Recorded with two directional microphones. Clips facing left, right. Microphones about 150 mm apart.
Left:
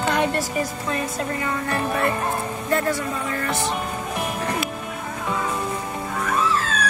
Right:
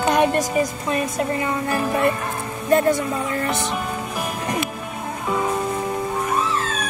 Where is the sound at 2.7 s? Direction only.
20° right (ahead or behind).